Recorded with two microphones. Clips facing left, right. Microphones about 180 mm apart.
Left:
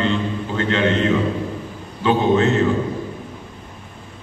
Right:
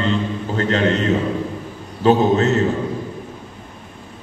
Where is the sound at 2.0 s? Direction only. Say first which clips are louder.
Right 2 dB; 40° right (ahead or behind).